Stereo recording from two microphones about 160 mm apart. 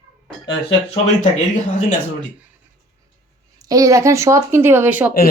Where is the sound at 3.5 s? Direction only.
20° right (ahead or behind).